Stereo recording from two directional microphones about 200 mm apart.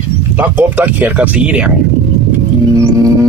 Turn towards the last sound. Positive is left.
turn(degrees=-15)  # may be behind; listen again after turning